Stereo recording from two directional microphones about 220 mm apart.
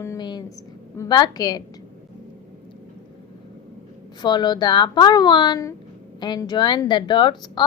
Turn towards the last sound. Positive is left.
turn(degrees=20)  # may be behind; listen again after turning